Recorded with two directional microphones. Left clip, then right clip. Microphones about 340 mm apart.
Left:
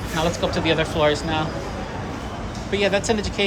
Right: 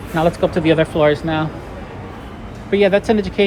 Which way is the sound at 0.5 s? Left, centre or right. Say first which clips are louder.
Right 6 dB; centre.